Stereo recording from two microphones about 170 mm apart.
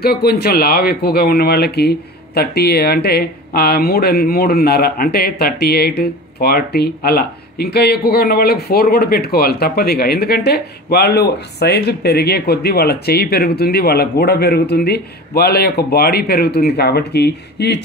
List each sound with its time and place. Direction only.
0.0 s speech: 70° left (ahead or behind)